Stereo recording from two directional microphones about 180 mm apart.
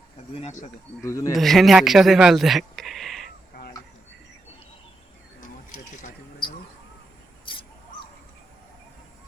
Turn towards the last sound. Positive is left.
turn(degrees=30)  # may be behind; listen again after turning